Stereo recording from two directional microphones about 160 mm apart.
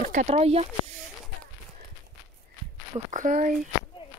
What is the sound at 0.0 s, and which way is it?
Speech, 50° right (ahead or behind).